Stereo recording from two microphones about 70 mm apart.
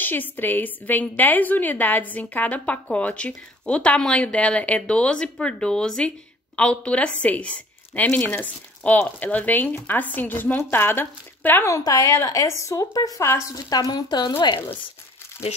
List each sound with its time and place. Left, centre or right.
0.0 s a woman's voice: left
11.9 s a woman's voice: left
13.2 s a woman's voice: left
13.5 s a woman's voice: left